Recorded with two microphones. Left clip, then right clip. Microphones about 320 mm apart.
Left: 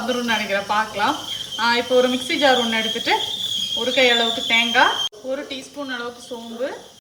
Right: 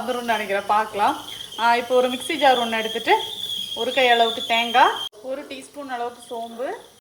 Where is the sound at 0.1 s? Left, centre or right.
Centre.